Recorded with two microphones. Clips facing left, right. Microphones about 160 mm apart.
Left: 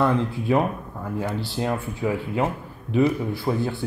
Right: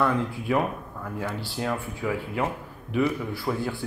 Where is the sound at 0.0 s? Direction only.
25° left (ahead or behind).